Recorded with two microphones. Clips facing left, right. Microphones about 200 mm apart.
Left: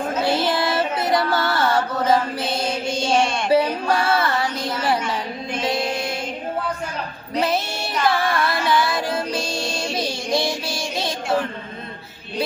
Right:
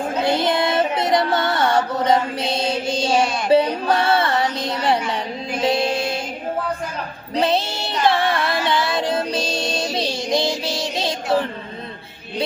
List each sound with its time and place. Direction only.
0.3 s music: 20° right (ahead or behind)
3.5 s a sound: 25° right (ahead or behind)
5.6 s music: 25° right (ahead or behind)
7.3 s child singing: 25° right (ahead or behind)
9.9 s music: 25° right (ahead or behind)